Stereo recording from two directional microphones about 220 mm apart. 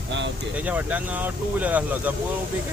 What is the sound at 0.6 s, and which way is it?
Speech, 5° right (ahead or behind).